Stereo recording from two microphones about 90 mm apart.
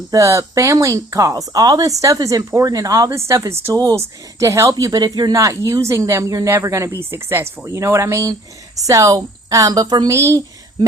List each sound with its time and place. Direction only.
0.1 s speech: 35° right (ahead or behind)